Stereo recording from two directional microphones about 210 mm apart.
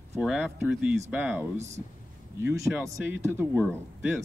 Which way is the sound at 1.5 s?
35° right (ahead or behind).